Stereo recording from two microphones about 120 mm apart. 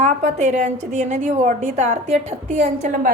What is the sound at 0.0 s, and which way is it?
A woman's voice, 80° right.